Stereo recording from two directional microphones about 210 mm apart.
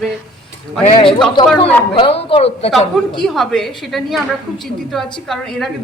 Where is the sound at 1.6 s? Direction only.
30° left (ahead or behind).